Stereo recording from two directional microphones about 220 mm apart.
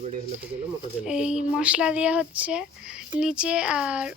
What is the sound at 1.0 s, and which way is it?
Speech, 5° right (ahead or behind).